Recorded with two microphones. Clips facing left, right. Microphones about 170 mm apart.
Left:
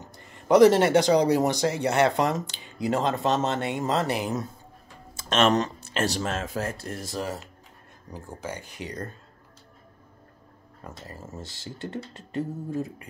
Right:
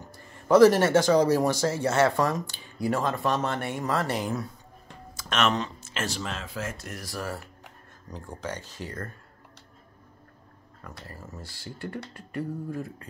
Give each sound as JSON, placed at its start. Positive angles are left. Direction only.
{"t": 0.0, "sound": "speech", "side_deg": 20}
{"t": 5.1, "sound": "a sound", "side_deg": 30}
{"t": 5.9, "sound": "speech", "side_deg": 35}
{"t": 8.1, "sound": "speech", "side_deg": 10}
{"t": 10.8, "sound": "speech", "side_deg": 25}